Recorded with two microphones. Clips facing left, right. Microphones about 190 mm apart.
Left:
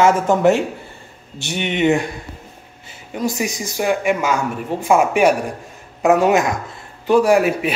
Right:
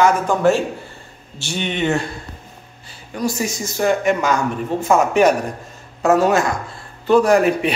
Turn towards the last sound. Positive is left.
turn(degrees=10)  # may be behind; listen again after turning